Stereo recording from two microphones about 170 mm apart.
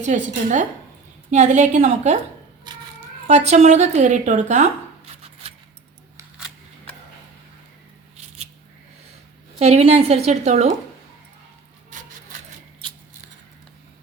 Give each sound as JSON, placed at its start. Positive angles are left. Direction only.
{"t": 0.0, "sound": "a woman's voice", "side_deg": -45}
{"t": 3.2, "sound": "a woman's voice", "side_deg": -40}
{"t": 5.2, "sound": "keys jangling", "side_deg": -35}
{"t": 9.6, "sound": "a woman's voice", "side_deg": -40}